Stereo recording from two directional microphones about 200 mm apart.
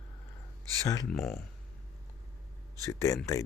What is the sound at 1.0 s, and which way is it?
Speech, centre (ahead or behind).